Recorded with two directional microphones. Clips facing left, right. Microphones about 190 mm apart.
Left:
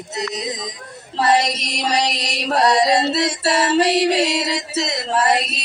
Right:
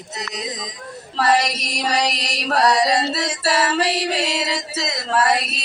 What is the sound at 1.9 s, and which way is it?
Music, 25° left (ahead or behind).